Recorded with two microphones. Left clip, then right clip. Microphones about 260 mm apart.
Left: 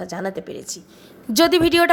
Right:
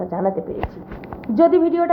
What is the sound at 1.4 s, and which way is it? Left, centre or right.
Speech, left.